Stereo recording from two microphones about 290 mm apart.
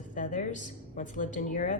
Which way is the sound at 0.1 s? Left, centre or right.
Left.